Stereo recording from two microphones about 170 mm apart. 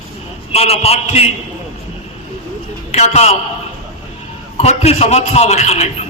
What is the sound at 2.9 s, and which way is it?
Speech, 40° left (ahead or behind).